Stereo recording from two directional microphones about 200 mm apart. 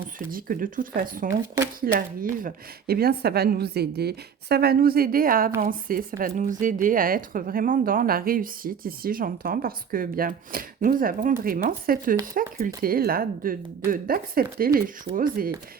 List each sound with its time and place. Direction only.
0.3 s speech: 45° right (ahead or behind)
1.3 s speech: 15° right (ahead or behind)
1.8 s speech: 45° right (ahead or behind)